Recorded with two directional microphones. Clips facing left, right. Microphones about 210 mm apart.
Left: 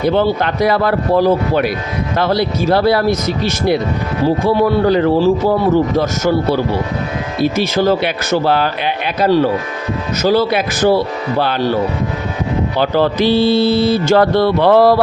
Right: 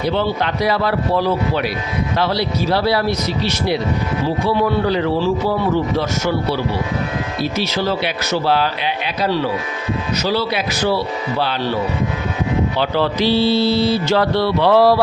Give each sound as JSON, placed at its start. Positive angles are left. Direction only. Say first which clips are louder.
{"t": 0.0, "sound": "mantra", "louder": "left 5 dB", "side_deg": 50}
{"t": 12.7, "sound": "mantra", "louder": "left 4 dB", "side_deg": 45}